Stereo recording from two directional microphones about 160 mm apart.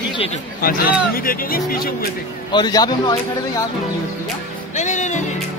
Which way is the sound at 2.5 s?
25° left (ahead or behind).